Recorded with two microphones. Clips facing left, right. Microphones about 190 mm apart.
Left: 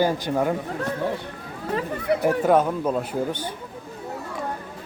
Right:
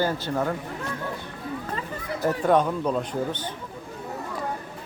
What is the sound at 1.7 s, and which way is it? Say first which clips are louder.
Speech: left 8 dB; 65° left (ahead or behind).